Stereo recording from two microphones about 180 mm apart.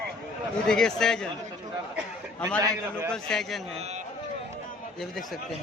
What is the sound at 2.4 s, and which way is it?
Speech, 5° left (ahead or behind).